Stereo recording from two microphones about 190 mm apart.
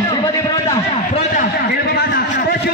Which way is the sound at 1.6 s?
55° left (ahead or behind).